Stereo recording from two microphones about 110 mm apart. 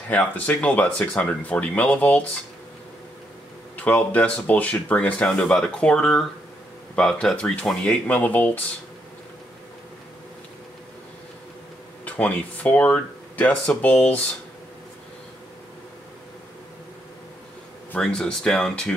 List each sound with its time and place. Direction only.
0.1 s speech: 15° left (ahead or behind)
3.7 s speech: 15° left (ahead or behind)
8.1 s speech: 15° left (ahead or behind)
12.0 s speech: 15° left (ahead or behind)
17.9 s speech: 5° left (ahead or behind)